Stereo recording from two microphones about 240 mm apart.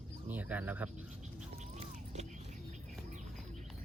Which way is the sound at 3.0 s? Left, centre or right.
Right.